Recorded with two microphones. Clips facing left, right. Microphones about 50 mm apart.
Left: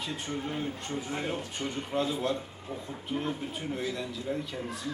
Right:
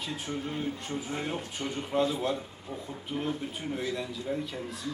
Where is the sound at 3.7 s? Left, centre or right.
Centre.